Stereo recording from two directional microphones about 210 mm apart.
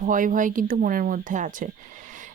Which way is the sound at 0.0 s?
40° right (ahead or behind).